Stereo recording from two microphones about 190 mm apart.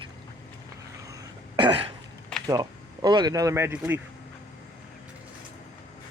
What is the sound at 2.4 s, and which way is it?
Speech, 20° right (ahead or behind).